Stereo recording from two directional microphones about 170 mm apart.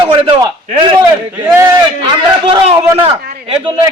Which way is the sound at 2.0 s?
25° right (ahead or behind).